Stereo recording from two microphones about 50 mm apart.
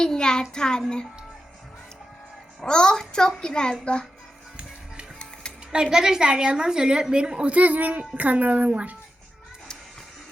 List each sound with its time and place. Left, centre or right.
0.0 s child singing: centre
0.5 s a child's voice: centre
2.6 s a child's voice: centre
5.2 s music: centre
5.7 s a woman's voice: centre; by 9.0 s right